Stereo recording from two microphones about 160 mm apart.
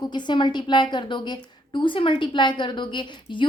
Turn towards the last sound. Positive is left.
turn(degrees=30)  # may be behind; listen again after turning